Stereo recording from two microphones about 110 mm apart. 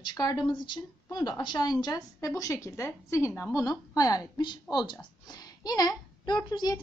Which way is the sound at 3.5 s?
35° left (ahead or behind).